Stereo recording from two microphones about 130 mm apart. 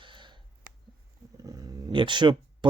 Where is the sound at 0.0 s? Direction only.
40° right (ahead or behind).